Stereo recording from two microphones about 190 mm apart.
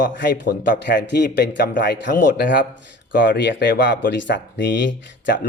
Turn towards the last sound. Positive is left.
turn(degrees=70)  # may be behind; listen again after turning